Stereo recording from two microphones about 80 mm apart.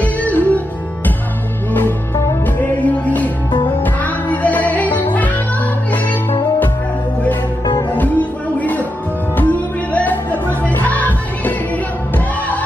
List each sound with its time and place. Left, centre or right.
0.0 s music: centre
1.7 s music: left
7.9 s music: centre